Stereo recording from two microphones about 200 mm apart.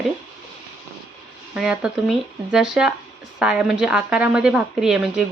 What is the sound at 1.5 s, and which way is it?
A woman's voice, 5° right (ahead or behind).